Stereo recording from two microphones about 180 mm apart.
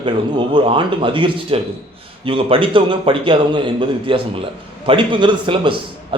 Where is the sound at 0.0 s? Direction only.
30° right (ahead or behind).